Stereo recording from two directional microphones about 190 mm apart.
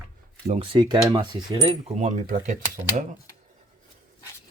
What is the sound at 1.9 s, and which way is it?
Speech, 35° right (ahead or behind).